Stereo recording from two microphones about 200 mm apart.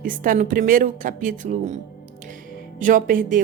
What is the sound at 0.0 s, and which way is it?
A woman's voice, 45° right (ahead or behind).